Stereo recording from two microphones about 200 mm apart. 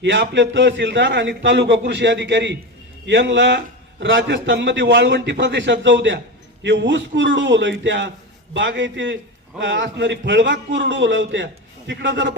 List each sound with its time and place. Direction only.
0.0 s a man's voice: 65° right (ahead or behind)